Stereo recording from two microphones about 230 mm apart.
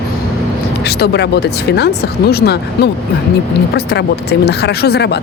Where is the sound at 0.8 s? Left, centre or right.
Left.